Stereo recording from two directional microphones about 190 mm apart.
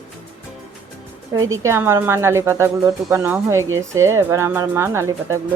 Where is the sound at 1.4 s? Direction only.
15° right (ahead or behind).